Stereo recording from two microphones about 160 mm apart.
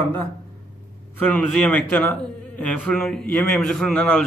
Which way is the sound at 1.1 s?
10° left (ahead or behind).